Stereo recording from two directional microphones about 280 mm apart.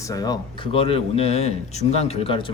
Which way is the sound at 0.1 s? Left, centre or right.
Centre.